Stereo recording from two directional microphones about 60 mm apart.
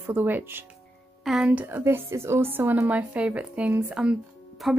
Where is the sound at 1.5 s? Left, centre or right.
Right.